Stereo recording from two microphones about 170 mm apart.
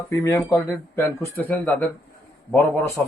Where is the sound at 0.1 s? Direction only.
15° left (ahead or behind).